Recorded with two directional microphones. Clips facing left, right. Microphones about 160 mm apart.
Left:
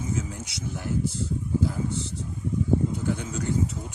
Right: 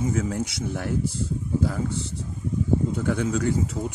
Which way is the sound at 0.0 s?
60° right (ahead or behind).